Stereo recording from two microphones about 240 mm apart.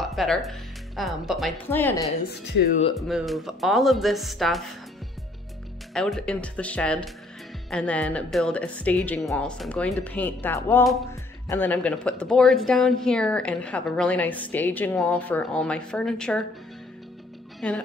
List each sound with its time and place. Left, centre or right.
0.0 s speech: centre
2.5 s speech: left
3.0 s speech: centre
5.9 s speech: centre
17.6 s speech: centre